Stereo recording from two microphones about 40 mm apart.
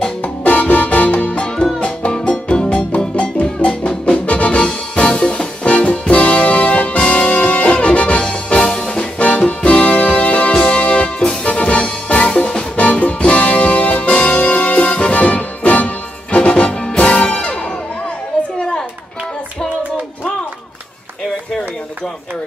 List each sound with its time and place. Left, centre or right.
0.2 s music: left
8.9 s music: left
10.5 s music: left
12.7 s music: left
18.6 s a sound: centre